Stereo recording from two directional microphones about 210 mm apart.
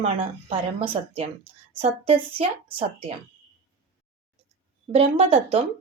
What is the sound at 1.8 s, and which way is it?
A woman's voice, 25° right (ahead or behind).